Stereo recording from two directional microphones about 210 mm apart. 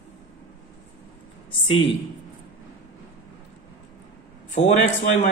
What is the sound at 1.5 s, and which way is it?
Speech, 25° left (ahead or behind).